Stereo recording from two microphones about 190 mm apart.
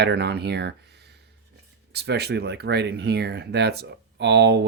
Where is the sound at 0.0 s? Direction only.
60° right (ahead or behind).